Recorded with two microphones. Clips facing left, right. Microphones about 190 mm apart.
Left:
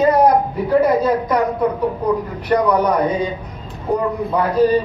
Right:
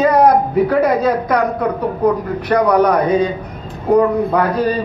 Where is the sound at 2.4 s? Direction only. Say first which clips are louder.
Right 3 dB; 75° right (ahead or behind).